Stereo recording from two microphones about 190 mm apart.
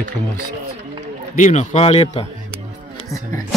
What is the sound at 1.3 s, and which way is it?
Speech, 40° left (ahead or behind).